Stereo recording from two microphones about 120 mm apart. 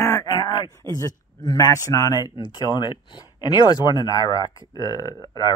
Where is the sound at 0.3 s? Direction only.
35° left (ahead or behind).